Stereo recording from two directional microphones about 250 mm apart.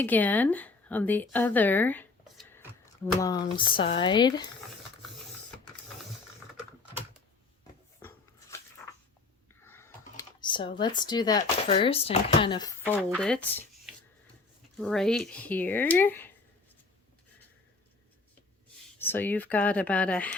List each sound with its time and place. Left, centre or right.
0.0 s a woman's voice: centre
7.9 s a sound: centre
9.6 s speech: centre
12.8 s speech: centre
18.9 s speech: centre